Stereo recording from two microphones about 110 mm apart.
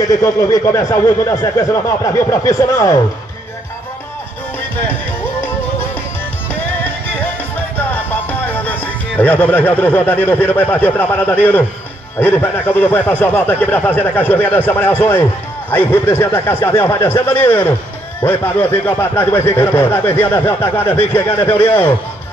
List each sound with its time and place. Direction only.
0.1 s speech: 30° left (ahead or behind)
7.7 s speech: 15° left (ahead or behind)